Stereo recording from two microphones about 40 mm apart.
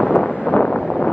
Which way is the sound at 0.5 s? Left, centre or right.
Left.